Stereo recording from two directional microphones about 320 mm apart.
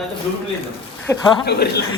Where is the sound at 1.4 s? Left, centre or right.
Left.